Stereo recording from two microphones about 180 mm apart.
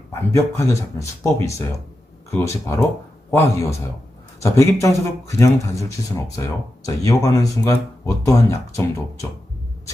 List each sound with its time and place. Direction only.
0.1 s speech: 15° left (ahead or behind)